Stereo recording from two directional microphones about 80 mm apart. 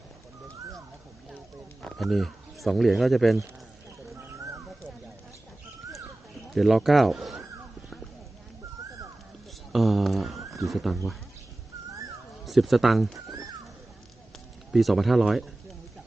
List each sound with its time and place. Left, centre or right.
2.0 s speech: centre
6.5 s speech: centre
9.7 s a sound: centre
10.5 s speech: centre
12.5 s speech: centre
13.1 s music: right
14.7 s speech: centre